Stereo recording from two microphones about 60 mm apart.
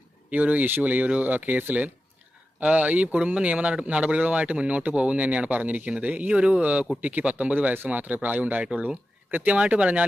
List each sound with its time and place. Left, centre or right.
0.3 s speech: right